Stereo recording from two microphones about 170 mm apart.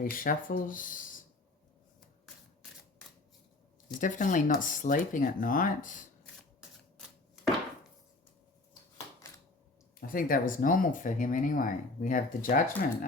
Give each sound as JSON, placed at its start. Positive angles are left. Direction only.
{"t": 0.0, "sound": "speech", "side_deg": 55}
{"t": 4.0, "sound": "speech", "side_deg": 50}
{"t": 10.1, "sound": "speech", "side_deg": 55}